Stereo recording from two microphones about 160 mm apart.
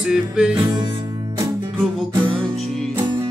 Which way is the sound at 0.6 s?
25° right (ahead or behind).